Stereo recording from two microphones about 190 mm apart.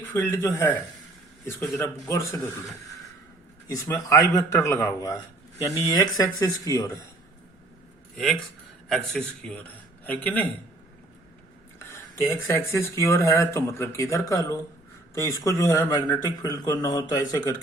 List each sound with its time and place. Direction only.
0.1 s speech: 10° left (ahead or behind)
3.7 s speech: 15° left (ahead or behind)
8.1 s a man's voice: centre (ahead or behind)
11.8 s speech: 15° left (ahead or behind)